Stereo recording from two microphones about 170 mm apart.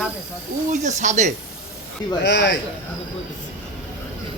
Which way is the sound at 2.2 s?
90° left.